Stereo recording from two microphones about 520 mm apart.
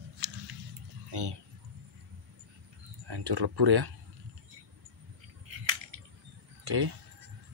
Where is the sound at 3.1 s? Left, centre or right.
Right.